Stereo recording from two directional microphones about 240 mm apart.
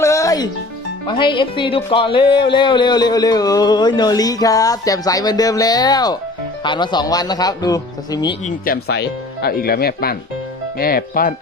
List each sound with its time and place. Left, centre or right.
0.0 s music: centre
1.0 s speech: left
8.4 s speech: left